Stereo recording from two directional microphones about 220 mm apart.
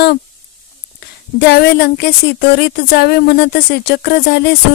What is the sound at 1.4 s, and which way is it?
Speech, 50° left (ahead or behind).